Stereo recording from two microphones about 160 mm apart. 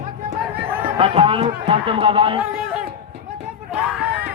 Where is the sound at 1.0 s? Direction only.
35° right (ahead or behind).